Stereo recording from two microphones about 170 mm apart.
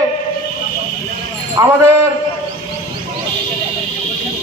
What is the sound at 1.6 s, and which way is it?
Speech, 20° right (ahead or behind).